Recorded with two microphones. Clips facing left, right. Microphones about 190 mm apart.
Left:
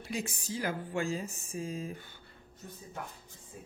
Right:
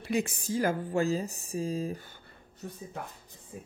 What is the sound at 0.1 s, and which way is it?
A woman's voice, 60° right (ahead or behind).